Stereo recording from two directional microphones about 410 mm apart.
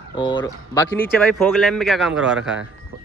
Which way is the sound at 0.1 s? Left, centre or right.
Centre.